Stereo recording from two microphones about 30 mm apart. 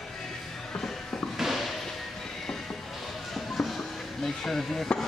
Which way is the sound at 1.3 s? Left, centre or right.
Centre.